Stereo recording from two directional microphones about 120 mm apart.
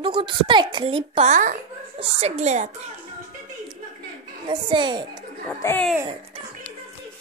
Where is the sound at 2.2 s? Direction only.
70° right (ahead or behind).